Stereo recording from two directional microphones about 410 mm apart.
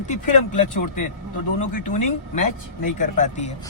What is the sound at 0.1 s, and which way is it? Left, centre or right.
Speech, centre.